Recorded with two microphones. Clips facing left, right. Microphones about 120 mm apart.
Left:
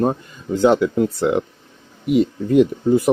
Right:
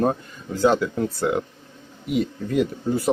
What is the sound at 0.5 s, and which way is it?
Speech, 20° left (ahead or behind).